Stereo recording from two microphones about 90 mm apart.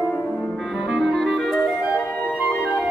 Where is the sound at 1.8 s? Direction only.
15° right (ahead or behind).